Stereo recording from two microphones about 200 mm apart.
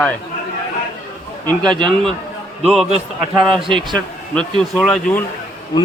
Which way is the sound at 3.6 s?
25° right (ahead or behind).